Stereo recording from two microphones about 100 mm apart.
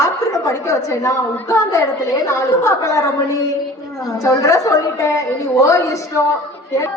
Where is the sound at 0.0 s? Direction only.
35° left (ahead or behind).